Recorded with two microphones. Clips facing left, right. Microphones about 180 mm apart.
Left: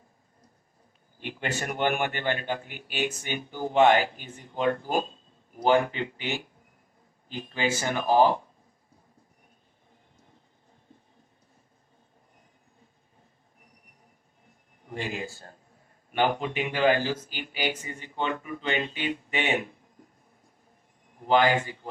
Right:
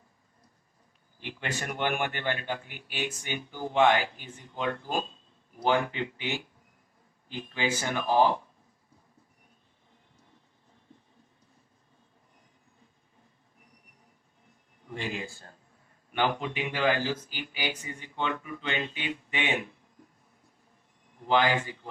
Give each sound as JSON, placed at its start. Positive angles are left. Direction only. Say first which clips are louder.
{"t": 1.6, "sound": "speech", "louder": "left 3 dB", "side_deg": 45}
{"t": 14.8, "sound": "speech", "louder": "left 2 dB", "side_deg": 45}
{"t": 17.6, "sound": "speech", "louder": "left 5 dB", "side_deg": 30}
{"t": 17.8, "sound": "speech", "louder": "left 2 dB", "side_deg": 45}
{"t": 21.2, "sound": "speech", "louder": "left 3 dB", "side_deg": 45}